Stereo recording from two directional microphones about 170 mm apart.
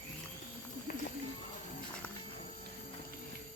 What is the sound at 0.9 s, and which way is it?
Run, 50° left (ahead or behind).